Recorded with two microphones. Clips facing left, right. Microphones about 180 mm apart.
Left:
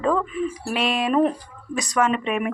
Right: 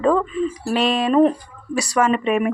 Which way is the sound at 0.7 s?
35° right (ahead or behind).